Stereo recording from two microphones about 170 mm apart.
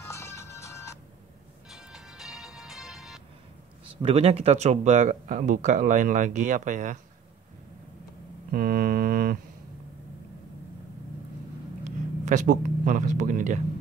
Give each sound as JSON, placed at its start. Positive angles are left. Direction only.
{"t": 0.0, "sound": "music", "side_deg": 15}
{"t": 1.7, "sound": "music", "side_deg": -5}
{"t": 4.0, "sound": "speech", "side_deg": -35}
{"t": 8.5, "sound": "a sound", "side_deg": -60}
{"t": 11.8, "sound": "speech", "side_deg": -45}